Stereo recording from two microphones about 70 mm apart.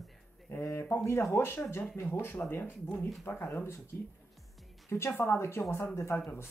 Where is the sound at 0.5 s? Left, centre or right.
Left.